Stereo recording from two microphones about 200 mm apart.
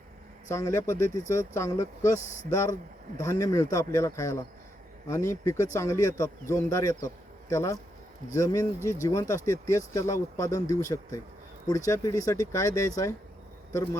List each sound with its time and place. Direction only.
0.5 s speech: 15° left (ahead or behind)